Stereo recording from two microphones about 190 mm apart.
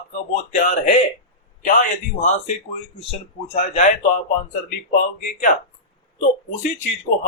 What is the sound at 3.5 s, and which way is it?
Speech, 35° left (ahead or behind).